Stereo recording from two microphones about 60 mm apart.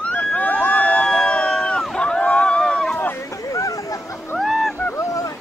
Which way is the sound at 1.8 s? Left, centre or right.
Centre.